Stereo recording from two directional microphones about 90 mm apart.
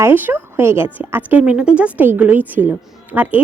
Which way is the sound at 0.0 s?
20° right (ahead or behind).